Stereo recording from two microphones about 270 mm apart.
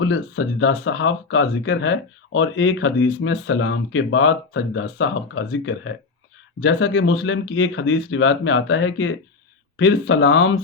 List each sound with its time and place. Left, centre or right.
0.0 s speech: left